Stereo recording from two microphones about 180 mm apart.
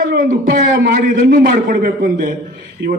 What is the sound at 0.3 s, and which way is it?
A man's voice, 50° right (ahead or behind).